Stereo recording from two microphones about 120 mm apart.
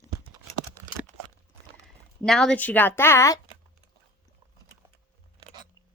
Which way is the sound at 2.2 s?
5° left (ahead or behind).